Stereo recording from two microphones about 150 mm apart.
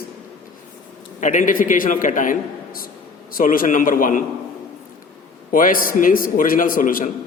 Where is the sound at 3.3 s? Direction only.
70° left (ahead or behind).